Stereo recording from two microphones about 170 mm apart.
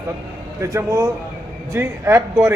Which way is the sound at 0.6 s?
20° right (ahead or behind).